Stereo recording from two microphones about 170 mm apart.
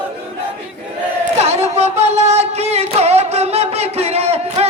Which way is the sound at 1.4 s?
40° right (ahead or behind).